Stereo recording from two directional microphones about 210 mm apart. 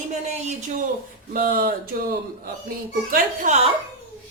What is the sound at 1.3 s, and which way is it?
Speech, 45° right (ahead or behind).